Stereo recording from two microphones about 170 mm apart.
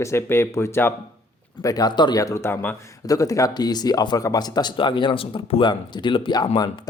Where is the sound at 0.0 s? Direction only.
15° left (ahead or behind).